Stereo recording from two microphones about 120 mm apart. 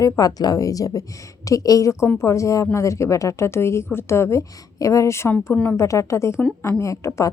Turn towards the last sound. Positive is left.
turn(degrees=25)  # may be behind; listen again after turning